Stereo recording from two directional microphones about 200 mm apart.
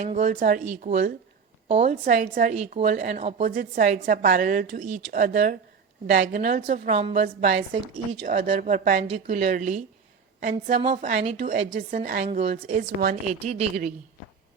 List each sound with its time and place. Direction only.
0.0 s a woman's voice: 35° right (ahead or behind)